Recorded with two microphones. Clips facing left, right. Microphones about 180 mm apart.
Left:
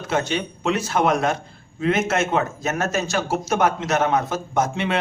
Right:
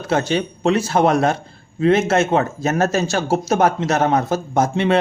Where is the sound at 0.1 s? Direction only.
35° right (ahead or behind).